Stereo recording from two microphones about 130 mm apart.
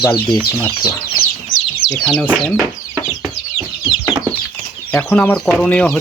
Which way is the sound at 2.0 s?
10° left (ahead or behind).